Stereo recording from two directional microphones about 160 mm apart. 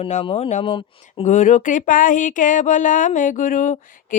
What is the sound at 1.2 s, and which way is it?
Speech, 50° left (ahead or behind).